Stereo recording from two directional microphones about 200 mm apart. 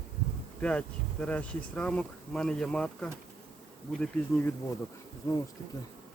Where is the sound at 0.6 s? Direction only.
5° left (ahead or behind).